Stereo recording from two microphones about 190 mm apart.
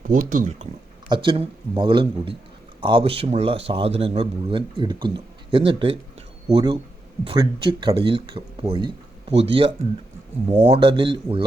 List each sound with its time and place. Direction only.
0.0 s speech: 45° right (ahead or behind)
1.1 s a man's voice: 25° right (ahead or behind)